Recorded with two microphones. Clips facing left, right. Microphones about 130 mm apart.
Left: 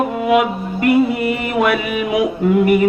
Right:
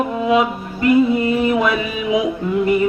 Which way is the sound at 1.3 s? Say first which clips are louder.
Even; 65° left (ahead or behind).